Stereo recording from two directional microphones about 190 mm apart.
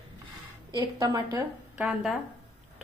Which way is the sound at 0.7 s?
20° right (ahead or behind).